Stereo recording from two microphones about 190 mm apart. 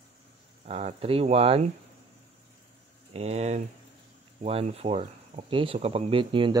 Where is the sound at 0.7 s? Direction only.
35° right (ahead or behind).